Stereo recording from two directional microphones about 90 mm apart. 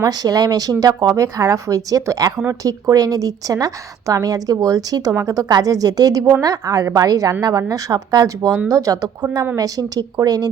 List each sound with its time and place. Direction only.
0.0 s a woman's voice: 45° right (ahead or behind)